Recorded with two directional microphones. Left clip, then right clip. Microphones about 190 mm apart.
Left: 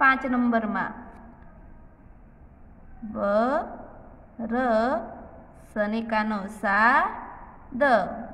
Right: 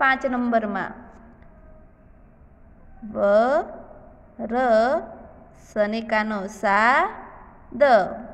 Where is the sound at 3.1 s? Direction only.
25° right (ahead or behind).